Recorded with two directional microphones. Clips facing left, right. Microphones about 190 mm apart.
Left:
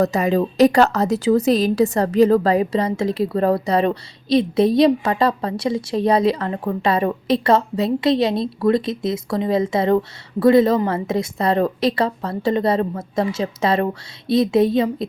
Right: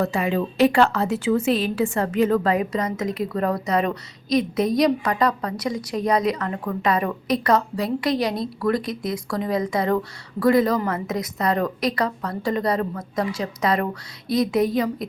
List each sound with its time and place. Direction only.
0.0 s a woman's voice: 40° left (ahead or behind)